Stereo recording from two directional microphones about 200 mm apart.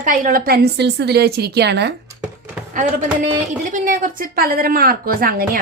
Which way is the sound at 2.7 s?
40° right (ahead or behind).